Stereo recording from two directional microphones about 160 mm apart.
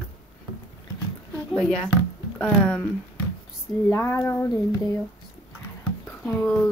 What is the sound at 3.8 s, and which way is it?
Speech, 20° left (ahead or behind).